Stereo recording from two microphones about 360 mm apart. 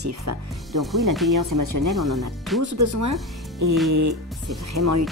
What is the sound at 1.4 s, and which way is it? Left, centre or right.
Speech, right.